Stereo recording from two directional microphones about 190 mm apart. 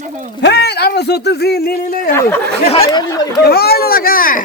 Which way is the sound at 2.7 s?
30° left (ahead or behind).